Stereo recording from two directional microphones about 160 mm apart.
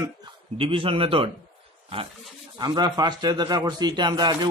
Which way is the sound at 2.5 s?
25° right (ahead or behind).